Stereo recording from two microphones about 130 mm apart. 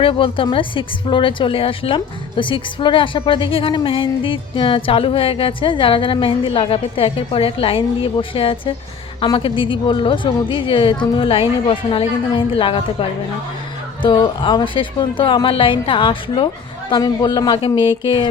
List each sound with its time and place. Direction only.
0.0 s a woman's voice: 45° left (ahead or behind)